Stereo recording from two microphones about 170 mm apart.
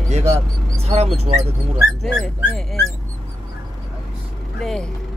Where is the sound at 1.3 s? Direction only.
40° right (ahead or behind).